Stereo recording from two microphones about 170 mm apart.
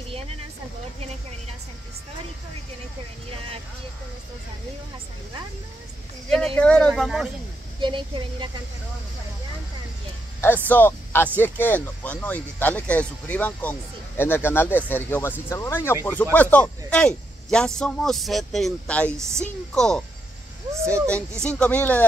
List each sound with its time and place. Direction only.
6.3 s speech: 5° left (ahead or behind)
7.8 s a woman's voice: 30° right (ahead or behind)
10.4 s speech: 10° left (ahead or behind)
20.7 s speech: 15° right (ahead or behind)
21.5 s speech: 10° left (ahead or behind)